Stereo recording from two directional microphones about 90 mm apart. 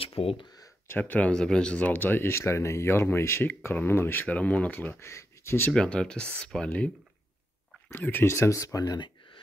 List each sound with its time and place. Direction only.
0.0 s speech: 90° left
0.8 s speech: 20° left (ahead or behind)
5.0 s speech: 30° left (ahead or behind)
5.7 s speech: 10° left (ahead or behind)
7.9 s speech: 25° left (ahead or behind); by 9.0 s 40° left (ahead or behind)